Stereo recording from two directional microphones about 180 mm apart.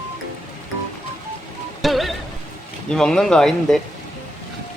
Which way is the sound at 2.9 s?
5° left (ahead or behind).